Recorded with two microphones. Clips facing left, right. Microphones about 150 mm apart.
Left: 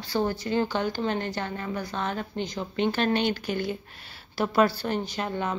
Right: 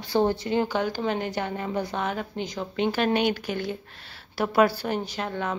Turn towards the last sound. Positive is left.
turn(degrees=0)  # may be behind; listen again after turning